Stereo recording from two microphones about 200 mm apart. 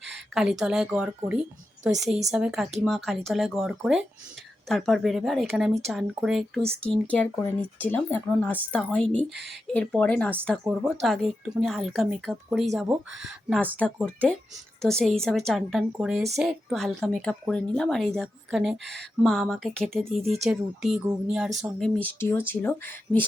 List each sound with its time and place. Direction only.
0.3 s a woman's voice: centre (ahead or behind)
6.7 s speech: 30° right (ahead or behind)
7.1 s a woman's voice: 5° left (ahead or behind)